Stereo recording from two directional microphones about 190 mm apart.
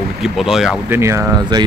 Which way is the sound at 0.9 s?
15° right (ahead or behind).